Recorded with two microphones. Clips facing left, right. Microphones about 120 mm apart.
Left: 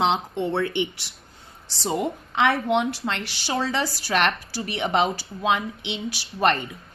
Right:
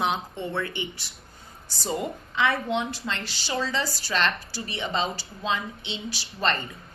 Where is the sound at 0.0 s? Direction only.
80° left.